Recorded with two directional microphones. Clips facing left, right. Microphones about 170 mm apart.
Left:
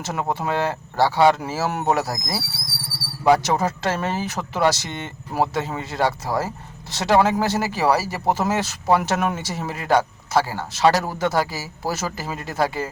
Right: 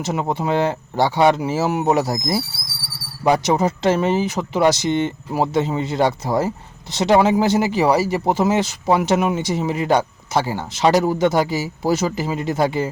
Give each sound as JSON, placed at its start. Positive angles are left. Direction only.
{"t": 0.0, "sound": "speech", "side_deg": -15}